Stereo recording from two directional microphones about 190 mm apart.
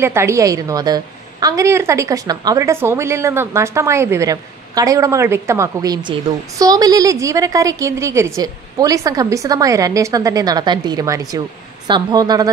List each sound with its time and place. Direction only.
0.0 s a woman's voice: 15° right (ahead or behind)